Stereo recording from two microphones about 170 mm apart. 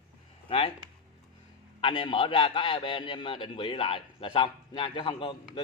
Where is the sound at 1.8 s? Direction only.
30° left (ahead or behind).